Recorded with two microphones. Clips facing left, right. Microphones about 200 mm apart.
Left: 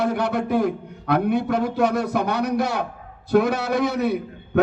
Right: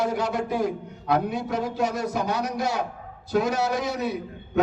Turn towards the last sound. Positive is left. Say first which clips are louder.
# left 6 dB
turn(degrees=60)  # may be behind; listen again after turning